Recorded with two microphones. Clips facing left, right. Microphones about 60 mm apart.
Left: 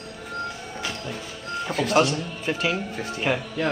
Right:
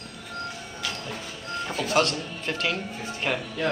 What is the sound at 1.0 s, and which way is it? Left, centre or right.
Music, centre.